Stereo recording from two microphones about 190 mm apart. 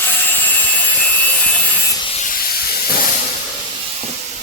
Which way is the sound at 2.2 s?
50° left (ahead or behind).